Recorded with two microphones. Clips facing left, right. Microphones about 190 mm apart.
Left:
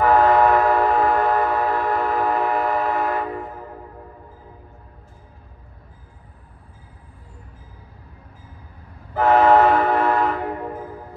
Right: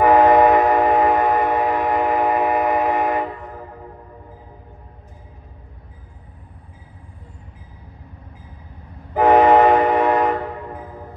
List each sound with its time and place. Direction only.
0.0 s train: 15° right (ahead or behind)
9.1 s train: 15° right (ahead or behind)